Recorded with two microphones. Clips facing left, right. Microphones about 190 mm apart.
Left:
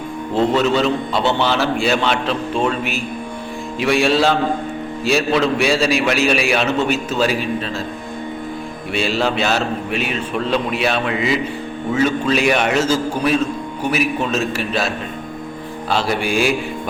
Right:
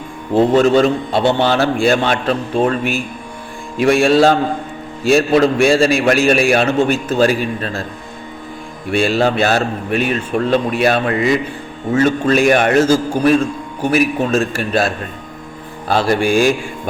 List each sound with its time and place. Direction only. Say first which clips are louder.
0.5 s a man's voice: right 7 dB; 50° right (ahead or behind)
8.9 s a man's voice: right 5 dB; 50° right (ahead or behind)
16.2 s a man's voice: right 6 dB; 45° right (ahead or behind)